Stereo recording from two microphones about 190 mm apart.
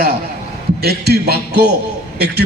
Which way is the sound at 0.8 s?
55° right (ahead or behind).